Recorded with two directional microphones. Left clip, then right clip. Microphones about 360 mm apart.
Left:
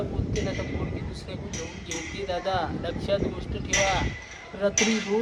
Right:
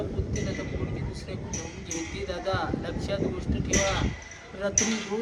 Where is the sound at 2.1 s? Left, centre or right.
Centre.